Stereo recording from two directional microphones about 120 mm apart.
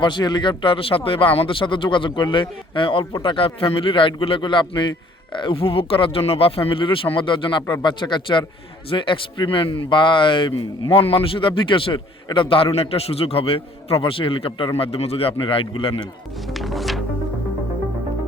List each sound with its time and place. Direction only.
0.0 s speech: 40° left (ahead or behind)
16.6 s music: centre (ahead or behind)